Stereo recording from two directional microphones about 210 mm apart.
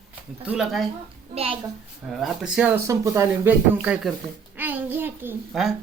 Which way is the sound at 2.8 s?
15° right (ahead or behind).